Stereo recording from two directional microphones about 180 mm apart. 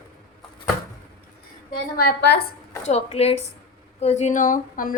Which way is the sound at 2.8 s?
35° left (ahead or behind).